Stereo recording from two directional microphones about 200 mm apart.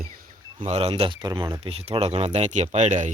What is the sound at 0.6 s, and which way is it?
Speech, 30° right (ahead or behind).